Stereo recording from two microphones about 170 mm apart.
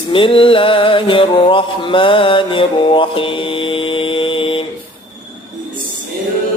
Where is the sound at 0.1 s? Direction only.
30° left (ahead or behind).